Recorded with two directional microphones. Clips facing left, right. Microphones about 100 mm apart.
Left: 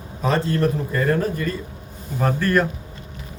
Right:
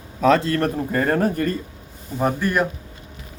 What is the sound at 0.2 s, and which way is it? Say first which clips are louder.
Speech: right 5 dB; 90° right.